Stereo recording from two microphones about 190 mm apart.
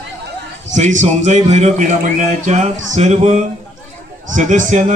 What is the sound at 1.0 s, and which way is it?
Speech, 35° right (ahead or behind).